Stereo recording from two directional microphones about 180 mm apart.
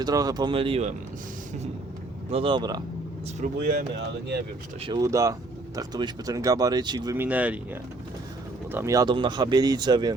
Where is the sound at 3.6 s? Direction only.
60° right (ahead or behind).